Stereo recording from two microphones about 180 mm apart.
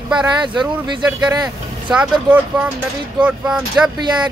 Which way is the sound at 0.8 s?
20° right (ahead or behind).